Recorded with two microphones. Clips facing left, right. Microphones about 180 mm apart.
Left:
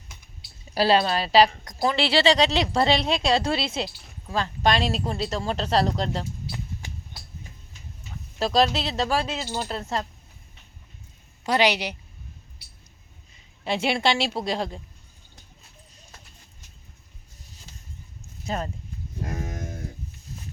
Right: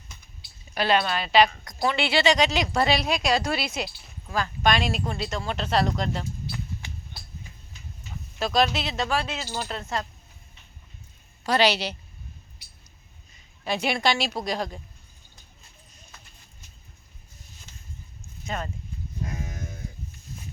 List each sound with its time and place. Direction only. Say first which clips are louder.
0.7 s a woman's voice: left 3 dB; 30° left (ahead or behind)
8.4 s a woman's voice: left 2 dB; 35° left (ahead or behind)
11.4 s a woman's voice: even; 15° left (ahead or behind)
13.7 s speech: left 1 dB; 25° left (ahead or behind)
18.4 s speech: left 3 dB; 35° left (ahead or behind)
19.2 s livestock: left 3 dB; 50° left (ahead or behind)